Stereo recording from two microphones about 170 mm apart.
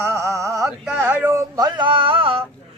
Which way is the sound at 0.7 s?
5° right (ahead or behind).